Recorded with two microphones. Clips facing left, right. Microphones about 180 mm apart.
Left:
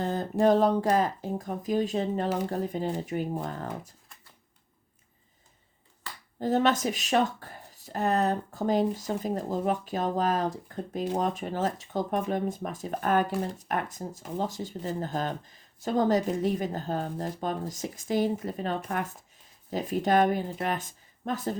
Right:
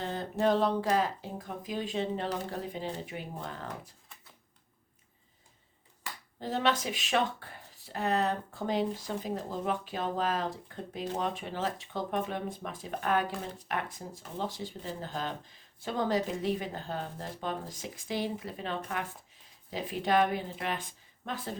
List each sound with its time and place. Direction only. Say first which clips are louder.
0.0 s speech: left 5 dB; 45° left (ahead or behind)
6.4 s speech: left 6 dB; 45° left (ahead or behind)